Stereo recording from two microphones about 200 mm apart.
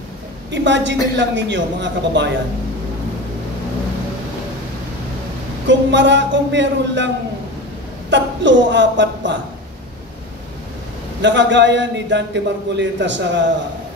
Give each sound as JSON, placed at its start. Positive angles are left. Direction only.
{"t": 0.5, "sound": "speech", "side_deg": -60}
{"t": 5.7, "sound": "speech", "side_deg": -65}
{"t": 8.1, "sound": "speech", "side_deg": -65}
{"t": 11.1, "sound": "speech", "side_deg": -65}